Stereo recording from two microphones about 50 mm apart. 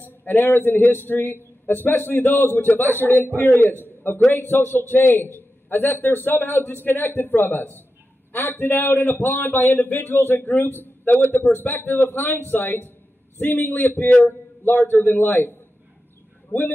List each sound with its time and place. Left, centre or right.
0.0 s a man's voice: left
3.8 s a sound: left
4.3 s a man's voice: left